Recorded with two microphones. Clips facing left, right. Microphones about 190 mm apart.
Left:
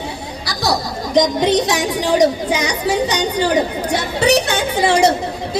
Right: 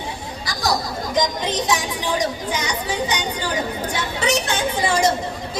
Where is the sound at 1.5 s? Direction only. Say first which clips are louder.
Left 6 dB; 70° left (ahead or behind).